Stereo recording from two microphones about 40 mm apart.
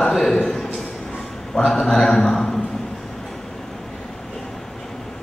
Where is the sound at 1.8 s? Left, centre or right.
Centre.